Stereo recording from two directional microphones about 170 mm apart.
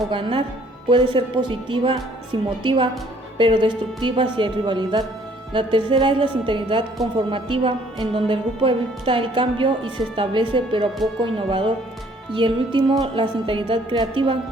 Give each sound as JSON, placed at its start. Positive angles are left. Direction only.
{"t": 0.1, "sound": "a woman's voice", "side_deg": -30}